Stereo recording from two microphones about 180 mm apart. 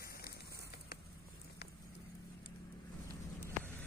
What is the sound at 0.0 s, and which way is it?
Fire, 55° left (ahead or behind).